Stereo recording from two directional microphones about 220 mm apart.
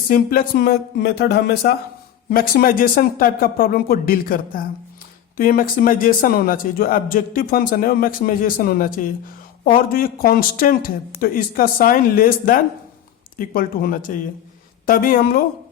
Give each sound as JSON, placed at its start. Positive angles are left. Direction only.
{"t": 0.1, "sound": "a man's voice", "side_deg": 40}